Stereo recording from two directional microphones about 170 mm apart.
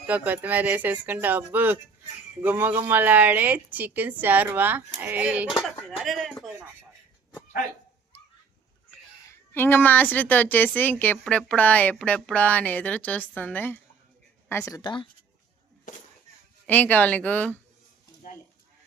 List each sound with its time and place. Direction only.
0.1 s speech: 10° right (ahead or behind)
9.5 s a woman's voice: 15° left (ahead or behind)
16.6 s a woman's voice: 10° left (ahead or behind)
18.3 s a sound: 55° left (ahead or behind)